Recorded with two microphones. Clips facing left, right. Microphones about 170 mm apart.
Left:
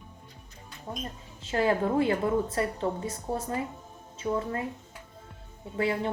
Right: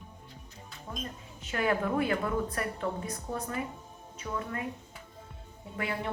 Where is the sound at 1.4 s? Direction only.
30° left (ahead or behind).